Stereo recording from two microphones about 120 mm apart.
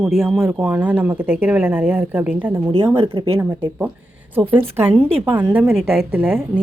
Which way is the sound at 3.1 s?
40° right (ahead or behind).